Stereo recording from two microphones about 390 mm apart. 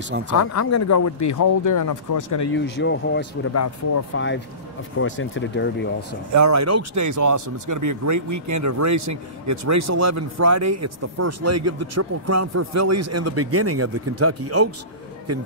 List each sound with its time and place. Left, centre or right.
0.4 s speech: left
2.5 s speech: left
3.5 s speech: left
6.3 s speech: right